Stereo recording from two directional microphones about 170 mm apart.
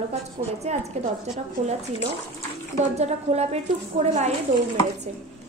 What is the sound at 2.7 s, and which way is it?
A woman's voice, 40° right (ahead or behind).